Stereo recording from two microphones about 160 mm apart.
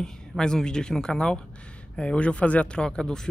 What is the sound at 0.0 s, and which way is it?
A woman's voice, 5° left (ahead or behind).